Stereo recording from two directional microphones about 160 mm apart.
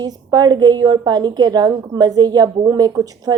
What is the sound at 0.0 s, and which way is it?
A woman's voice, 25° right (ahead or behind).